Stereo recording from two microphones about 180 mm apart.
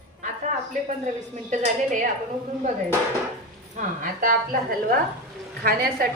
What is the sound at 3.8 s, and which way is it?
Speech, 45° right (ahead or behind).